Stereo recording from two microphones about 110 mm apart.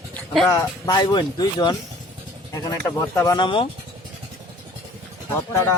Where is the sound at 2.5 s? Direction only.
30° left (ahead or behind).